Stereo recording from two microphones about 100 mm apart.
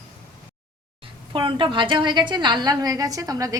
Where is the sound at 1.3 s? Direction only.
55° right (ahead or behind).